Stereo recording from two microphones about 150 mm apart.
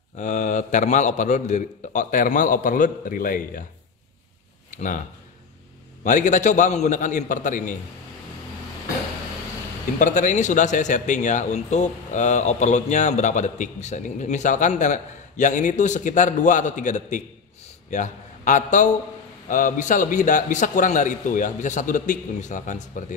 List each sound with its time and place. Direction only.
0.2 s a man's voice: 55° left (ahead or behind)
4.6 s speech: 60° left (ahead or behind)
6.0 s a man's voice: 55° left (ahead or behind)
9.9 s a man's voice: 55° left (ahead or behind)